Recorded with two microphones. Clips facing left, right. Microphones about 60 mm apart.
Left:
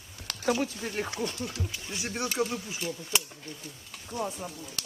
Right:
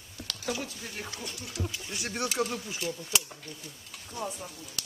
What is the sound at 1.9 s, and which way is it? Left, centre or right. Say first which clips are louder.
Speech: left 2 dB; centre.